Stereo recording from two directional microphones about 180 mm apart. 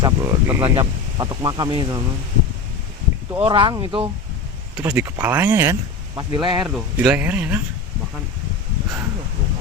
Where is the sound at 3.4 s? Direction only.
25° right (ahead or behind).